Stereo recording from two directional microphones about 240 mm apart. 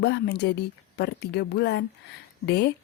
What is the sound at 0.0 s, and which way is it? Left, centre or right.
A woman's voice, left.